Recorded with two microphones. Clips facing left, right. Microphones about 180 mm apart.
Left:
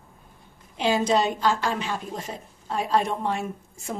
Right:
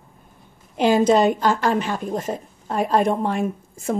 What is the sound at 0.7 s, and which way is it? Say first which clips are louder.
Speech: right 6 dB; 50° right (ahead or behind).